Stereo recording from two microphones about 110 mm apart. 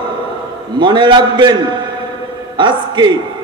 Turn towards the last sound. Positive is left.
turn(degrees=-45)  # may be behind; listen again after turning